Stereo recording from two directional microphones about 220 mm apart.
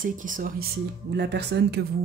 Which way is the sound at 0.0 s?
35° right (ahead or behind).